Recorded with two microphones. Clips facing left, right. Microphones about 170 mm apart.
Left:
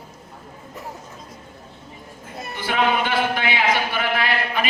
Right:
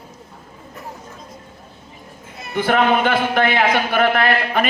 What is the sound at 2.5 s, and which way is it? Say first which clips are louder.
A man's voice: right 5 dB; 55° right (ahead or behind).